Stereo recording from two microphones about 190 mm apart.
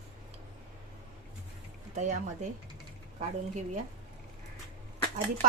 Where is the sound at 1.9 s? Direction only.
40° right (ahead or behind).